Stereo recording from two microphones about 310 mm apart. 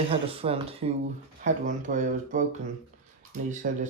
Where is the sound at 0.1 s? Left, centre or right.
Centre.